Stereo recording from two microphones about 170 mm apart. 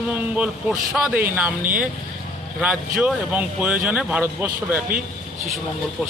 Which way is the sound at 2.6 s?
5° right (ahead or behind).